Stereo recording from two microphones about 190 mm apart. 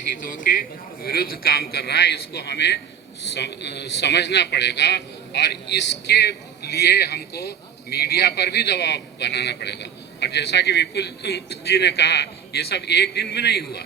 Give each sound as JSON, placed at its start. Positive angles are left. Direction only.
{"t": 0.3, "sound": "a man's voice", "side_deg": 45}